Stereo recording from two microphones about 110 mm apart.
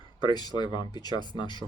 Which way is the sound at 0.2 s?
40° left (ahead or behind).